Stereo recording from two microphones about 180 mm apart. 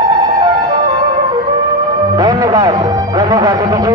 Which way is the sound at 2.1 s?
20° right (ahead or behind).